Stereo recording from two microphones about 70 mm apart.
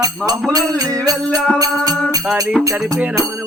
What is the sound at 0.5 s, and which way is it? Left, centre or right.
Music, right.